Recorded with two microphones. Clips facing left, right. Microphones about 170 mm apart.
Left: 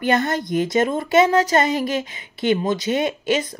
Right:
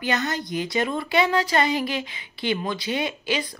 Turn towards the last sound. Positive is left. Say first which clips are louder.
# left 6 dB
turn(degrees=45)  # may be behind; listen again after turning